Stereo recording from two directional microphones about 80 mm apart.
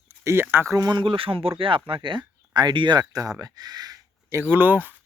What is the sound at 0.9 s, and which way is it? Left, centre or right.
Speech, right.